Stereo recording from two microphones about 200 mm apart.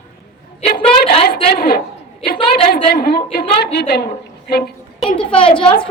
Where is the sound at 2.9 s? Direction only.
50° left (ahead or behind).